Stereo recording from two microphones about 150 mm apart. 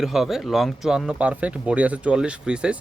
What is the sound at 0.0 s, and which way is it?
Speech, centre (ahead or behind).